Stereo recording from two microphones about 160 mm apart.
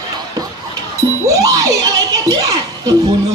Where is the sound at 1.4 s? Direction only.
20° right (ahead or behind).